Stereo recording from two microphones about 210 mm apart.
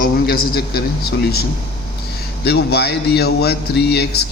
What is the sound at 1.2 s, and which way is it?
A man's voice, 50° left (ahead or behind).